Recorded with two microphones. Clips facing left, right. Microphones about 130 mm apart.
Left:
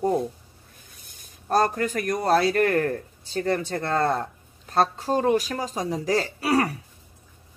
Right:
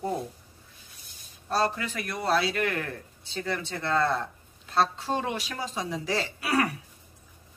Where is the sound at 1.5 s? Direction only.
50° left (ahead or behind).